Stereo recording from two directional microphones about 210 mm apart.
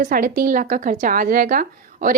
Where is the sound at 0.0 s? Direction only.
40° right (ahead or behind).